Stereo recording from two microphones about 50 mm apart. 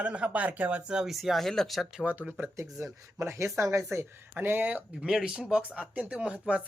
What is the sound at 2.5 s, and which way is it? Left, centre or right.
Speech, right.